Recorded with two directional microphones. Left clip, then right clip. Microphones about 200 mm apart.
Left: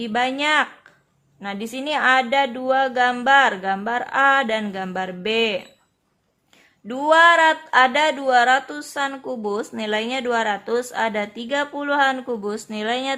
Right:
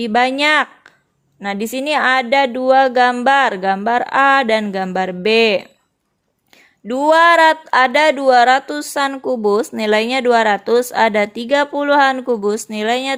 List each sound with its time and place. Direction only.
0.0 s speech: 30° right (ahead or behind)
6.8 s speech: 25° right (ahead or behind)